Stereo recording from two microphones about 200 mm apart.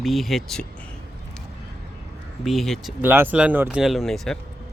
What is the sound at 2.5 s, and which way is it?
Speech, centre (ahead or behind).